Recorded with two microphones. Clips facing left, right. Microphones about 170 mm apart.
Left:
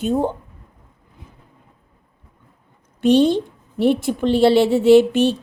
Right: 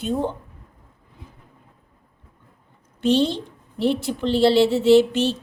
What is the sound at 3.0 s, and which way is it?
A woman's voice, 50° left (ahead or behind).